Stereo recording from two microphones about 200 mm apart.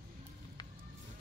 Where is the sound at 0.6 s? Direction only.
20° left (ahead or behind).